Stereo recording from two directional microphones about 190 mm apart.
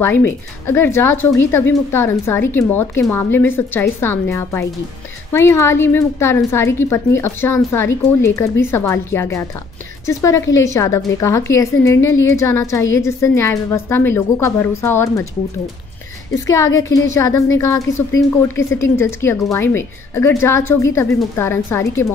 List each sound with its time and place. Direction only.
0.0 s speech: 10° left (ahead or behind)
16.4 s speech: 15° left (ahead or behind)